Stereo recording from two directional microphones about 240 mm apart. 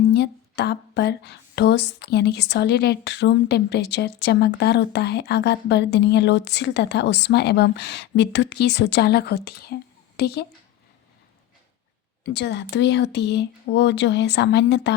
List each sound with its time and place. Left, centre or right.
0.1 s a woman's voice: left
12.2 s speech: left